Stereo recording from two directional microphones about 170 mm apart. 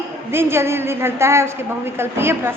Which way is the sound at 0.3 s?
15° right (ahead or behind).